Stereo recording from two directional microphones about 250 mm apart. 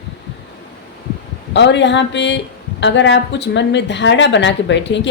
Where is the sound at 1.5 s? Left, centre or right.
Left.